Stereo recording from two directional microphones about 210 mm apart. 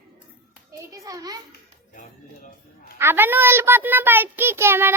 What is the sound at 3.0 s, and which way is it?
A child's voice, 10° right (ahead or behind).